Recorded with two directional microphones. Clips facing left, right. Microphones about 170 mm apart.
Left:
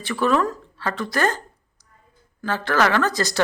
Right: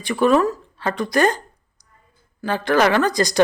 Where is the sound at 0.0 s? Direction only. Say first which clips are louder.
Right 4 dB; 15° right (ahead or behind).